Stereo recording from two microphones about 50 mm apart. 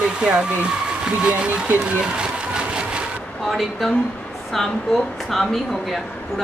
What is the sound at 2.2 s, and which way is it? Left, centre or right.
Engine, centre.